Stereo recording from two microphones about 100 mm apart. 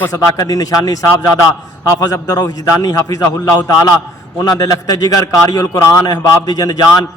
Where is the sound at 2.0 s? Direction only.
40° left (ahead or behind).